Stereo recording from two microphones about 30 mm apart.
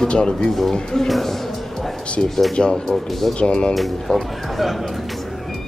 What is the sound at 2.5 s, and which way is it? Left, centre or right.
Speech, left.